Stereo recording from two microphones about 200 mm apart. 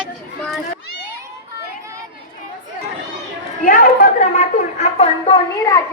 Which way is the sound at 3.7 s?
45° left (ahead or behind).